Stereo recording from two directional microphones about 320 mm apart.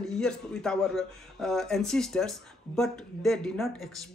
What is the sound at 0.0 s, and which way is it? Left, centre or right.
Speech, centre.